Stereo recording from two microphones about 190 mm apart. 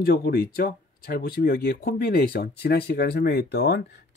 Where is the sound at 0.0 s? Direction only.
55° left (ahead or behind).